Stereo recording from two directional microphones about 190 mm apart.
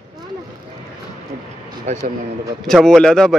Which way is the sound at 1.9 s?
40° right (ahead or behind).